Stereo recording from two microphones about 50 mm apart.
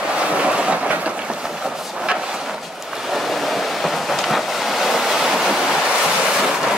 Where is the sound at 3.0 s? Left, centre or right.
Centre.